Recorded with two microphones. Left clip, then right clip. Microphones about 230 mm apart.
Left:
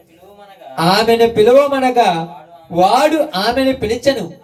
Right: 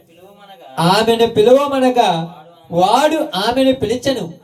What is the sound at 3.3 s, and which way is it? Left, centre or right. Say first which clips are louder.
Speech: even; right.